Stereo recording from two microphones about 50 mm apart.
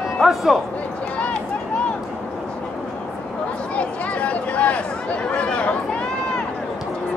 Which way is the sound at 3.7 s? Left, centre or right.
Left.